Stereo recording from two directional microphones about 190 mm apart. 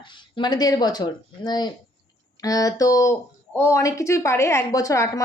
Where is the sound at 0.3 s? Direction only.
20° left (ahead or behind).